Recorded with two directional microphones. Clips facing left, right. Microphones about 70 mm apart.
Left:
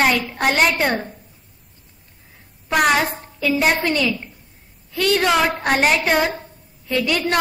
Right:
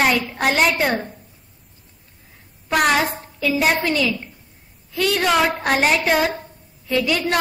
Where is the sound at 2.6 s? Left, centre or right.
Centre.